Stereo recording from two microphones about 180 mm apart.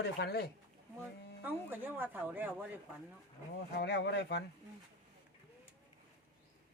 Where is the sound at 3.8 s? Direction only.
70° left (ahead or behind).